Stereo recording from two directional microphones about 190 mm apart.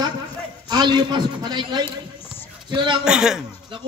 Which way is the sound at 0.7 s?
20° right (ahead or behind).